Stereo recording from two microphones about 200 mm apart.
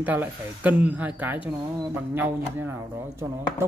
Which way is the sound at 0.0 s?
10° right (ahead or behind).